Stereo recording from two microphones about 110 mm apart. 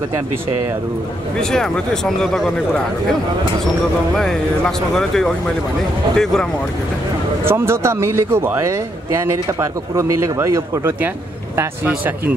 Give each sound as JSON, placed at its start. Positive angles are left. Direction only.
{"t": 1.4, "sound": "speech", "side_deg": 5}
{"t": 4.2, "sound": "speech", "side_deg": 5}
{"t": 7.4, "sound": "speech", "side_deg": -20}